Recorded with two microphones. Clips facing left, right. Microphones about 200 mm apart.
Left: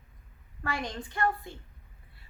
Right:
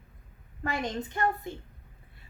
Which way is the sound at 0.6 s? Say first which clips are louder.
Right 3 dB; 20° right (ahead or behind).